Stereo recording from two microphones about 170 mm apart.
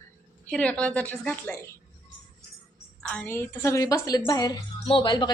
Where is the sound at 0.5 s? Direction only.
5° left (ahead or behind).